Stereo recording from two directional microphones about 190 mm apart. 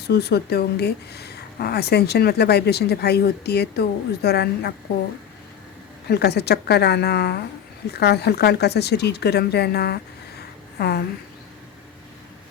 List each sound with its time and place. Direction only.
0.1 s speech: 60° left (ahead or behind)
6.1 s a woman's voice: 60° left (ahead or behind)